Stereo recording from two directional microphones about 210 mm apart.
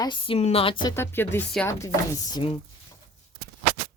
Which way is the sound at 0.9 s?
10° left (ahead or behind).